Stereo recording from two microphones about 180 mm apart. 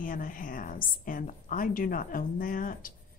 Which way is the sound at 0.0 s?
50° left (ahead or behind).